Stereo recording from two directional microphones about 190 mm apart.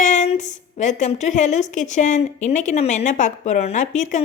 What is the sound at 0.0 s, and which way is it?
A woman's voice, 40° left (ahead or behind).